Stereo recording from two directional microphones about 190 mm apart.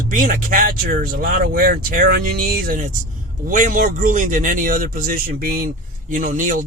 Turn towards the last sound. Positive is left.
turn(degrees=-45)  # may be behind; listen again after turning